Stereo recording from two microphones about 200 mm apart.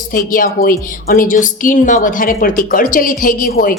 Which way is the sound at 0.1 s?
45° left (ahead or behind).